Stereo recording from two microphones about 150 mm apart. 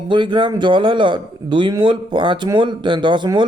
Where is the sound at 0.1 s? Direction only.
30° right (ahead or behind).